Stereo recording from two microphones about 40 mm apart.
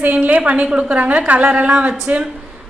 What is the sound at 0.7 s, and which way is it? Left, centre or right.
Speech, right.